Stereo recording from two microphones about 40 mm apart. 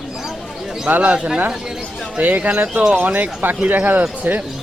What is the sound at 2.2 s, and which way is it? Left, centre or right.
Speech, right.